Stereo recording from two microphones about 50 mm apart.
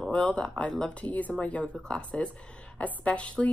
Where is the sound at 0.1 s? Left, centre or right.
Left.